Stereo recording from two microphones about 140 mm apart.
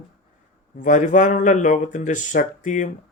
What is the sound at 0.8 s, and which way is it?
Speech, 65° left (ahead or behind).